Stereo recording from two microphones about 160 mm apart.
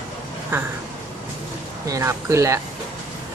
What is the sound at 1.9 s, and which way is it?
Speech, 15° right (ahead or behind).